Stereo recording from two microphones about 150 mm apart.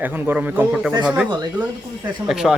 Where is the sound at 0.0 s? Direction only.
10° right (ahead or behind).